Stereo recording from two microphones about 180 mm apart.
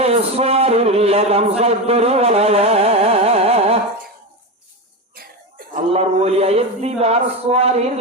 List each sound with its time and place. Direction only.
0.0 s a sound: 35° right (ahead or behind)
5.1 s cough: 55° right (ahead or behind)
5.9 s a man's voice: 35° right (ahead or behind)